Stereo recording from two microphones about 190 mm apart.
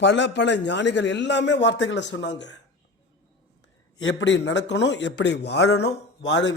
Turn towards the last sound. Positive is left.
turn(degrees=70)  # may be behind; listen again after turning